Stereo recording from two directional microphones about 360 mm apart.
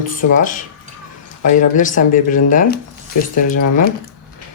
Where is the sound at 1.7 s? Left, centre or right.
Left.